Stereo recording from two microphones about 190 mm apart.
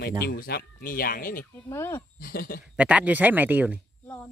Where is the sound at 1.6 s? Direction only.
15° left (ahead or behind).